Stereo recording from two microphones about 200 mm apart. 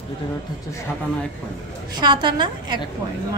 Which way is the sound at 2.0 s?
20° right (ahead or behind).